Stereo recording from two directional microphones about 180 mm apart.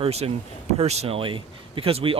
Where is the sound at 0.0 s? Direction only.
35° right (ahead or behind).